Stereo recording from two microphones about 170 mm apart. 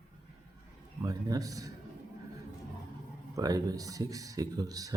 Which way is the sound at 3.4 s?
20° right (ahead or behind).